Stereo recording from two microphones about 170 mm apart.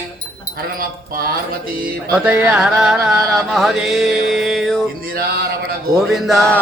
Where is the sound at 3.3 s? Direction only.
Centre (ahead or behind).